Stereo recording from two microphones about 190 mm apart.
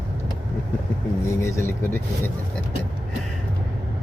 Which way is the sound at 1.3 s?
15° left (ahead or behind).